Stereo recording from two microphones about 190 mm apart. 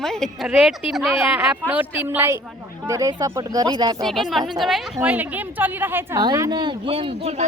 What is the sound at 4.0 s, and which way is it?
A woman's voice, centre (ahead or behind).